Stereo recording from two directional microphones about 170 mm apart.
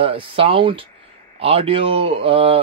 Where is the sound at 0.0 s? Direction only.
35° right (ahead or behind).